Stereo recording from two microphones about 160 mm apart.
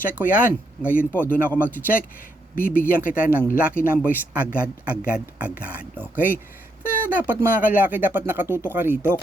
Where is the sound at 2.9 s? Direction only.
60° left (ahead or behind).